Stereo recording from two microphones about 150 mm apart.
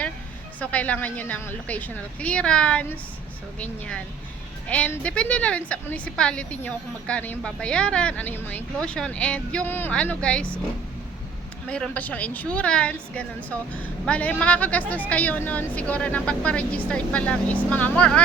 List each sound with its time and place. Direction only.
0.6 s a woman's voice: 10° left (ahead or behind)
11.7 s a woman's voice: 10° left (ahead or behind)